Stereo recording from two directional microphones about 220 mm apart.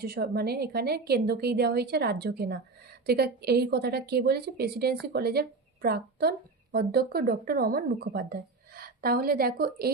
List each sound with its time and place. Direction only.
0.0 s a woman's voice: 45° right (ahead or behind)